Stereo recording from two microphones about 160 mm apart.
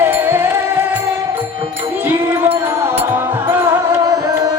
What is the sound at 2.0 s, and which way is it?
Music, 15° right (ahead or behind).